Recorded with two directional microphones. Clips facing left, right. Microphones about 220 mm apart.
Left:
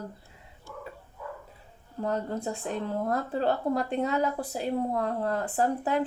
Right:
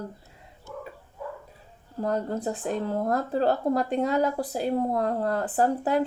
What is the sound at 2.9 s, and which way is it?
Speech, 40° right (ahead or behind).